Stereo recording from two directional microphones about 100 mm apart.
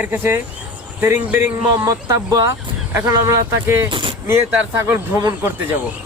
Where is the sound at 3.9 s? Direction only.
55° right (ahead or behind).